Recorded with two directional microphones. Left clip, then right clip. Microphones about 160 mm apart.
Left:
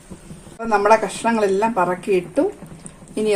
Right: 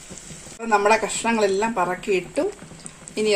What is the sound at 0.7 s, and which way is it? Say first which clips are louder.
A woman's voice: left 3 dB; centre (ahead or behind).